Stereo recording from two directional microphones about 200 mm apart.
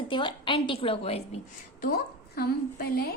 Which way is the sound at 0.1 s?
25° left (ahead or behind).